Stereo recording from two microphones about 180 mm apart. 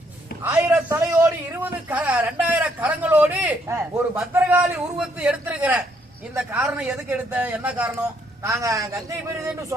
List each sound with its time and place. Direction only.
0.4 s a man's voice: 20° right (ahead or behind)